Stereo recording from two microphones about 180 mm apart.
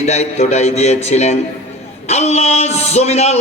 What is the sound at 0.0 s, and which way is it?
A man's voice, 40° left (ahead or behind).